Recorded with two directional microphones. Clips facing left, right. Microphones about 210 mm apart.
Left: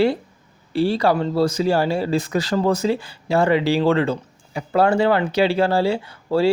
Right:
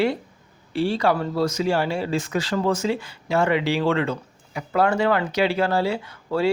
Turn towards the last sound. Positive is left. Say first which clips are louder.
# left 4 dB
turn(degrees=30)  # may be behind; listen again after turning